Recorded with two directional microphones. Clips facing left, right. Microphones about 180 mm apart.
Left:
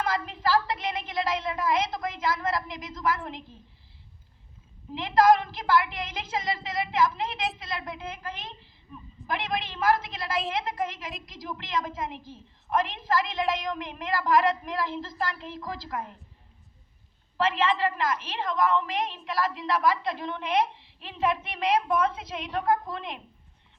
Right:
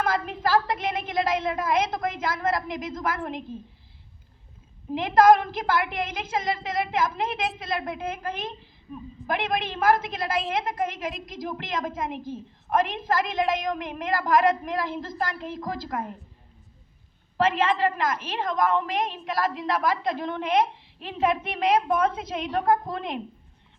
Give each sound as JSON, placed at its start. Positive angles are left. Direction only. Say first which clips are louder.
{"t": 0.0, "sound": "a woman's voice", "louder": "right 3 dB", "side_deg": -50}
{"t": 4.9, "sound": "a woman's voice", "louder": "right 3 dB", "side_deg": -50}
{"t": 17.3, "sound": "a woman's voice", "louder": "right 3 dB", "side_deg": -50}